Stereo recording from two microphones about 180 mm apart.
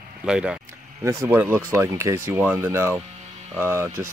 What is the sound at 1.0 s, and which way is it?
Speech, 15° right (ahead or behind).